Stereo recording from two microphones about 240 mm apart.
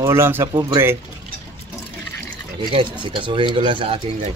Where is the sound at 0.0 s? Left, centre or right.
Centre.